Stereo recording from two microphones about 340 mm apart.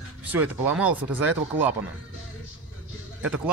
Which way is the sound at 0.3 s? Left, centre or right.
Centre.